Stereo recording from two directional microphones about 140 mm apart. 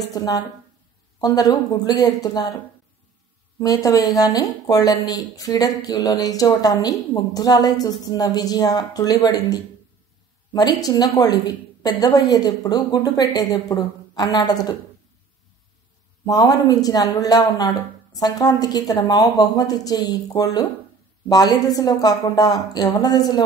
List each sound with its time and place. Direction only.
0.1 s speech: 25° left (ahead or behind)
3.5 s speech: 25° left (ahead or behind)
16.3 s speech: 30° left (ahead or behind)